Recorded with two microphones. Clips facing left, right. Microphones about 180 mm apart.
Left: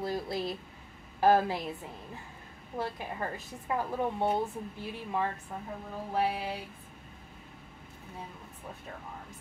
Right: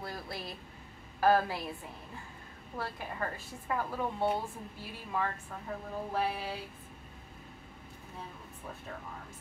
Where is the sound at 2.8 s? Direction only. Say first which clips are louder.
Left 3 dB; 20° left (ahead or behind).